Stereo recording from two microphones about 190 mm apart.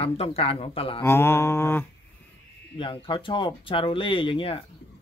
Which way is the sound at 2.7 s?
25° left (ahead or behind).